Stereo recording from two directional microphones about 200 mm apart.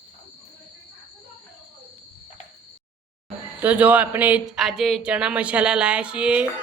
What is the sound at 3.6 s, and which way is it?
Speech, 10° right (ahead or behind).